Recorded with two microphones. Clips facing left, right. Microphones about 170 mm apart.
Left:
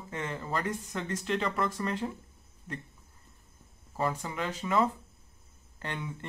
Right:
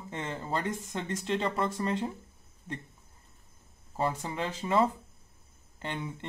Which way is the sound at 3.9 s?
25° right (ahead or behind).